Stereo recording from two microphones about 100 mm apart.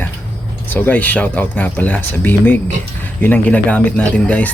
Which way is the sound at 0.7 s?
15° left (ahead or behind).